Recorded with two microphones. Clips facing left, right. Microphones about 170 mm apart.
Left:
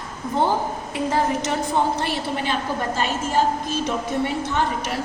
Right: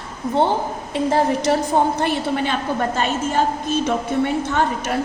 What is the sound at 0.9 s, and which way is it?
Speech, 35° right (ahead or behind).